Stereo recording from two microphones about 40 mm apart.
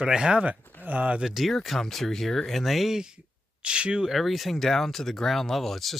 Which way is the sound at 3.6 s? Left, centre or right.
Right.